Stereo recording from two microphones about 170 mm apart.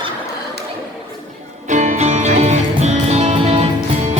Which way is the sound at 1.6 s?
45° right (ahead or behind).